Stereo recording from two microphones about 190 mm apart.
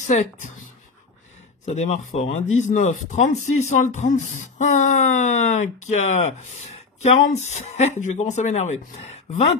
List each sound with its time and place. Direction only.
0.0 s speech: 40° left (ahead or behind)
1.7 s speech: 40° left (ahead or behind)